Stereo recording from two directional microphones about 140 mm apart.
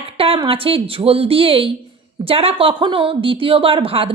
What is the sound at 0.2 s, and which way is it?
A woman's voice, 40° right (ahead or behind).